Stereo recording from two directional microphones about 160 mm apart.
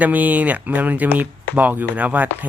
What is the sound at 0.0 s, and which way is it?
Speech, 10° right (ahead or behind).